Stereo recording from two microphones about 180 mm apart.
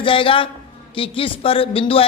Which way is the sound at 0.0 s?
30° left (ahead or behind).